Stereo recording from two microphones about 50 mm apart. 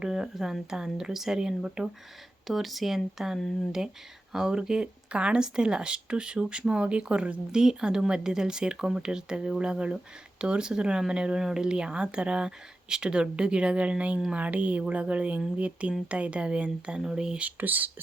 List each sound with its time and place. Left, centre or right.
0.0 s speech: centre
2.5 s speech: centre
3.3 s speech: centre
4.3 s speech: centre
7.6 s speech: centre
17.4 s speech: right